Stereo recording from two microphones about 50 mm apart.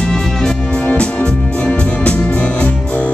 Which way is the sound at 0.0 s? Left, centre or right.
Centre.